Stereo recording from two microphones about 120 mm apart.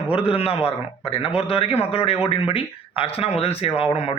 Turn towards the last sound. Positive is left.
turn(degrees=55)  # may be behind; listen again after turning